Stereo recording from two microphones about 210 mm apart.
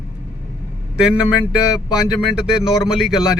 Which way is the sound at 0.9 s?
5° right (ahead or behind).